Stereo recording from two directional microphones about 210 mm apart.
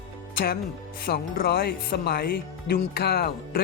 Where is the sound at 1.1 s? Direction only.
45° left (ahead or behind).